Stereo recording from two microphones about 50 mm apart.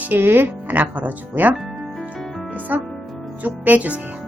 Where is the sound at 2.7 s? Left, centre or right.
Right.